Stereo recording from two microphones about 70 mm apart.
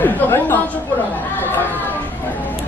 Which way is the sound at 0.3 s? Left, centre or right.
Left.